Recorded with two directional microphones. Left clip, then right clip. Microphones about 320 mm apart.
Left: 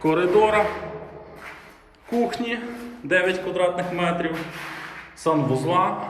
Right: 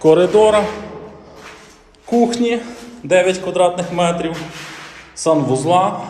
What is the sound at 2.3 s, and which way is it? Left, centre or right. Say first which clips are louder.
Speech: right 9 dB; centre.